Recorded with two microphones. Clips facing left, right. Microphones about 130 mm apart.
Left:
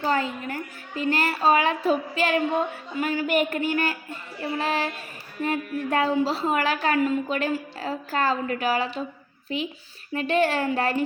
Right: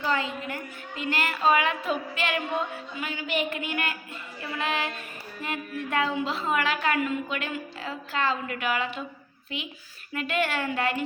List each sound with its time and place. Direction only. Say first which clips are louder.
0.0 s a woman's voice: left 3 dB; 40° left (ahead or behind)